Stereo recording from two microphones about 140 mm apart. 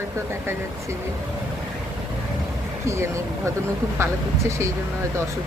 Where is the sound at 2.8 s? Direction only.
20° right (ahead or behind).